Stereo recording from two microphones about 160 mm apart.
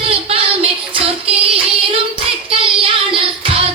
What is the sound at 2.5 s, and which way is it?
Child singing, 35° right (ahead or behind).